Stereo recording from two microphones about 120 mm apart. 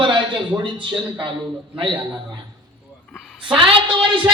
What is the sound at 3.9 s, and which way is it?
Speech, 45° right (ahead or behind).